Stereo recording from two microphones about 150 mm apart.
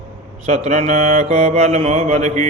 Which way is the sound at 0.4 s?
50° right (ahead or behind).